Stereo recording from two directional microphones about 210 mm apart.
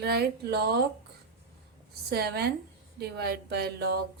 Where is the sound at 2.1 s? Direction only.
50° right (ahead or behind).